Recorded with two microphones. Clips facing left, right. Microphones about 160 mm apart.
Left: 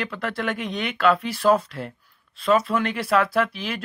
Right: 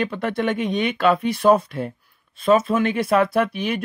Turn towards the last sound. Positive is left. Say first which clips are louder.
# right 3 dB
turn(degrees=-20)  # may be behind; listen again after turning